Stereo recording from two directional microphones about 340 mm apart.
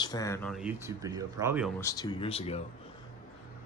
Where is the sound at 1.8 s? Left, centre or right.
Centre.